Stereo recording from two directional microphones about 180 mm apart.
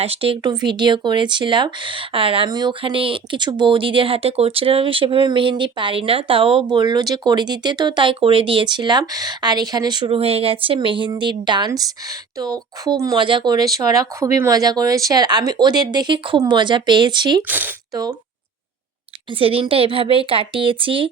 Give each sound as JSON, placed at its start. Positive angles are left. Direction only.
{"t": 0.0, "sound": "speech", "side_deg": -30}
{"t": 17.5, "sound": "speech", "side_deg": -10}
{"t": 19.4, "sound": "a woman's voice", "side_deg": -30}